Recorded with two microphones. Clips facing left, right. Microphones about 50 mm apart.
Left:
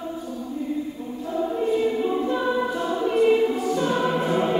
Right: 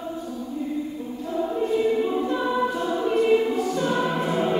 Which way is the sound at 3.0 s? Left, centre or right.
Centre.